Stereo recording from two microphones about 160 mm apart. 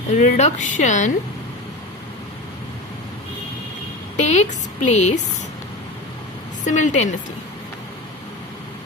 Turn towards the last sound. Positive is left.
turn(degrees=50)  # may be behind; listen again after turning